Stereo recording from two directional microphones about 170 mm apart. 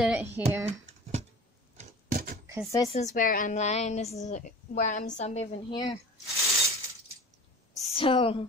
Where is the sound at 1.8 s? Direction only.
55° right (ahead or behind).